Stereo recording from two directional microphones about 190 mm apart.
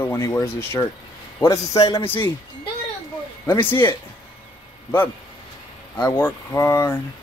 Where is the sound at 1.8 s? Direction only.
30° left (ahead or behind).